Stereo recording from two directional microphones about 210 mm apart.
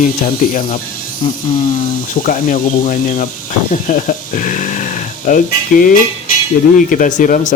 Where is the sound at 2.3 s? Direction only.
40° left (ahead or behind).